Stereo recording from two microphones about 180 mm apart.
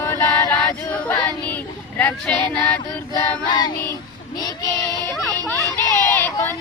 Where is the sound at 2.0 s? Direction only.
10° left (ahead or behind).